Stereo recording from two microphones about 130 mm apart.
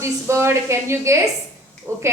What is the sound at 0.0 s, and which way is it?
A woman's voice, 20° right (ahead or behind).